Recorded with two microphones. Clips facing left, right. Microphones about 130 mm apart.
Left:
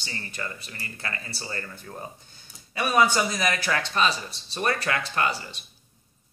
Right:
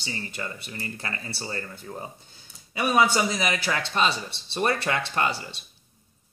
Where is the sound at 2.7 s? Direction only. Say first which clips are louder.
Even; 20° right (ahead or behind).